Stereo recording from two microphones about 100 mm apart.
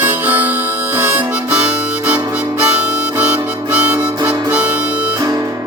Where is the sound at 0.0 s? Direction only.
20° right (ahead or behind).